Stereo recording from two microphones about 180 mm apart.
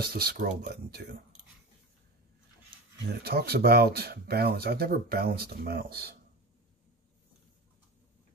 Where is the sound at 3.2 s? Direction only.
60° right (ahead or behind).